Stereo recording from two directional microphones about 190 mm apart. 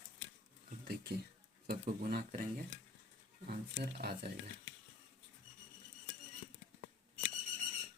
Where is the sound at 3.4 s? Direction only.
55° right (ahead or behind).